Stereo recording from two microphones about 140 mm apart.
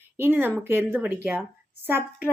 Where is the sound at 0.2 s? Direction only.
15° right (ahead or behind).